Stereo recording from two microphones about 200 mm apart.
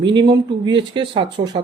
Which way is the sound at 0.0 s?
20° right (ahead or behind).